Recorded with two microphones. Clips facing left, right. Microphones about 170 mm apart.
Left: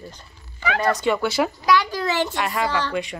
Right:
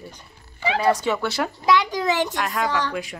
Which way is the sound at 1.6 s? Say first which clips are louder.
Right 4 dB; 20° right (ahead or behind).